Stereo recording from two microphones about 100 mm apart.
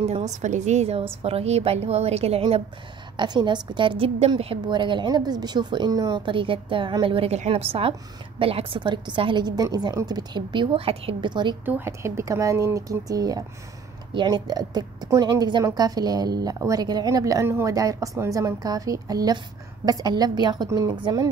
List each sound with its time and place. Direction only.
0.0 s a woman's voice: 90° right
3.2 s a woman's voice: 50° right (ahead or behind); by 4.6 s 75° right (ahead or behind)
4.6 s a woman's voice: 50° right (ahead or behind)
11.6 s a woman's voice: 20° right (ahead or behind); by 20.9 s 40° right (ahead or behind)
20.9 s a woman's voice: 50° right (ahead or behind)